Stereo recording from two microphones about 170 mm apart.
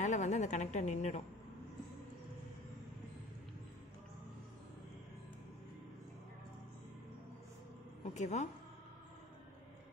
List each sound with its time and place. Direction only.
0.0 s a woman's voice: 45° left (ahead or behind)
8.0 s speech: 45° left (ahead or behind)